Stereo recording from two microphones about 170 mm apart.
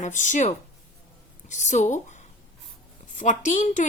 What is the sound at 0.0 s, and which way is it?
Speech, 45° left (ahead or behind).